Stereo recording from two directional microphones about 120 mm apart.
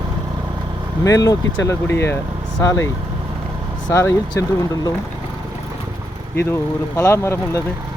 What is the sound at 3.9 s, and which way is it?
Speech, 20° left (ahead or behind).